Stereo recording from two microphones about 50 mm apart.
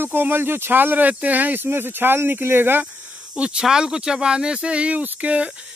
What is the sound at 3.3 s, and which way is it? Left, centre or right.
Speech, right.